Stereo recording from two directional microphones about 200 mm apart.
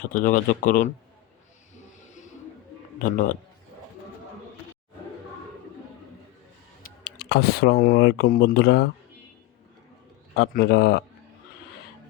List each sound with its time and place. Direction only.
0.1 s speech: 45° left (ahead or behind)
2.0 s a sound: 40° left (ahead or behind)
3.0 s speech: 40° left (ahead or behind)
6.8 s speech: 55° left (ahead or behind)
10.3 s speech: 55° left (ahead or behind)